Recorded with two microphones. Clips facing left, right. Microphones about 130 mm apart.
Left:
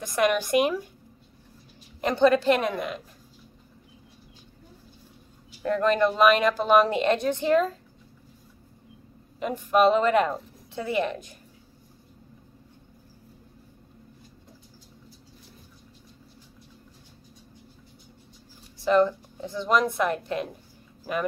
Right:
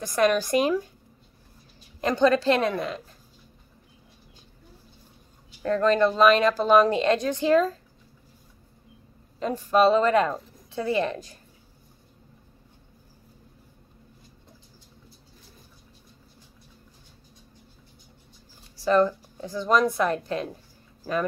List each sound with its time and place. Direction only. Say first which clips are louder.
0.0 s speech: right 2 dB; 20° left (ahead or behind)
2.0 s speech: even; 20° left (ahead or behind)
5.6 s speech: right 1 dB; 15° left (ahead or behind)
9.4 s speech: right 1 dB; 15° left (ahead or behind)
18.9 s speech: even; 20° left (ahead or behind)